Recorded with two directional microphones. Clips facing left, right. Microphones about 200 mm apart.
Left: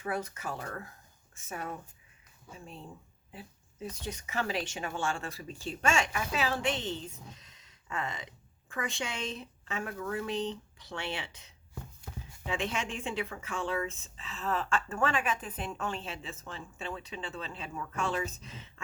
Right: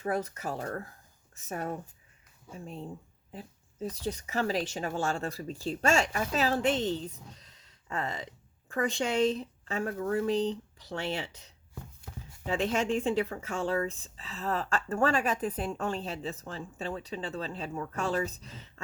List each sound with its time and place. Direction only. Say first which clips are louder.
0.0 s speech: right 4 dB; 40° right (ahead or behind)